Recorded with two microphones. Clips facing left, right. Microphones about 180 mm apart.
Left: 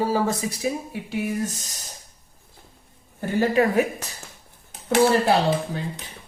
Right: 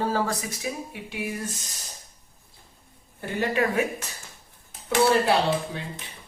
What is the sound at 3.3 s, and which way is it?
Speech, 35° left (ahead or behind).